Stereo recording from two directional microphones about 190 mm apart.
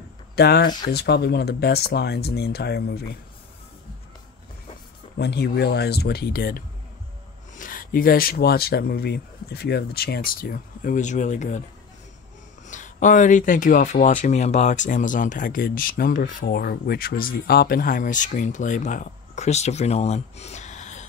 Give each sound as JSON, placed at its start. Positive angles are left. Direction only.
{"t": 0.4, "sound": "speech", "side_deg": 60}
{"t": 5.2, "sound": "speech", "side_deg": 60}
{"t": 12.6, "sound": "speech", "side_deg": 40}